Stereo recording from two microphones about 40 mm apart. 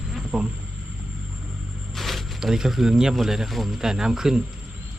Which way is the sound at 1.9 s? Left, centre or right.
Centre.